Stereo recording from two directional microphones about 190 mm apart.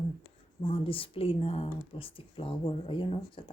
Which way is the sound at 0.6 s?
30° left (ahead or behind).